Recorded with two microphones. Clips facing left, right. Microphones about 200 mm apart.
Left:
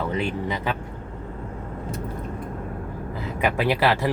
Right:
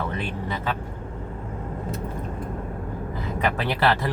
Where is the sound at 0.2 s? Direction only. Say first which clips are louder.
Left 4 dB; 15° left (ahead or behind).